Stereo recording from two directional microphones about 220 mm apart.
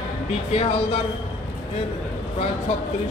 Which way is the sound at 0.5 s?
25° left (ahead or behind).